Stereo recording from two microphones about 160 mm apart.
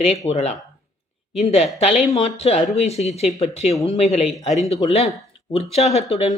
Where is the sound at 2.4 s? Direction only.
40° left (ahead or behind).